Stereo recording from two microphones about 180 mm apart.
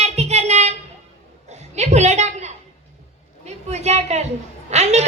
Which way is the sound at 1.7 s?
40° right (ahead or behind).